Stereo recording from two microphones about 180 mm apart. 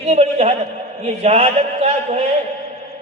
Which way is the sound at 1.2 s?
35° right (ahead or behind).